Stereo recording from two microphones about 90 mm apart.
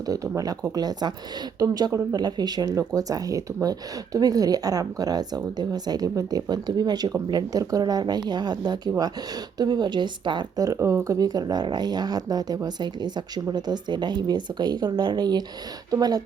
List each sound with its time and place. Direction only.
0.1 s speech: 40° right (ahead or behind); by 10.7 s 55° right (ahead or behind)
10.7 s speech: 30° right (ahead or behind)